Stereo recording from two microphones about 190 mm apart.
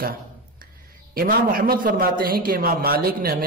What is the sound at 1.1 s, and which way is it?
A man's voice, 50° right (ahead or behind).